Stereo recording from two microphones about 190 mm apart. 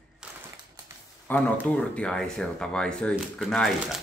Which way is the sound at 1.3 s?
10° left (ahead or behind).